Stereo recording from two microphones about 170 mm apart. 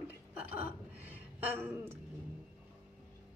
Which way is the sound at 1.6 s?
15° right (ahead or behind).